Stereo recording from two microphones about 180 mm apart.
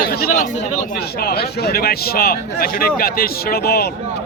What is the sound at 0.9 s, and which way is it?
A man's voice, 60° left (ahead or behind).